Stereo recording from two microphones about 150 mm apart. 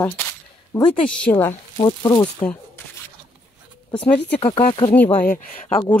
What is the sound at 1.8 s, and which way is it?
Speech, 25° left (ahead or behind).